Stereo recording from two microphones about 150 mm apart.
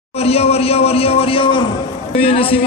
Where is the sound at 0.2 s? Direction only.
40° left (ahead or behind).